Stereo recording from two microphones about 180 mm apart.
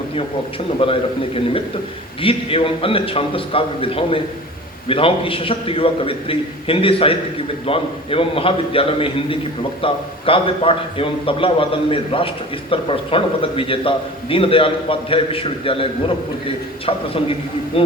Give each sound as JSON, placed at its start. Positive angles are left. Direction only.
{"t": 0.8, "sound": "a man's voice", "side_deg": 30}
{"t": 2.2, "sound": "a man's voice", "side_deg": 30}
{"t": 17.7, "sound": "a man's voice", "side_deg": 30}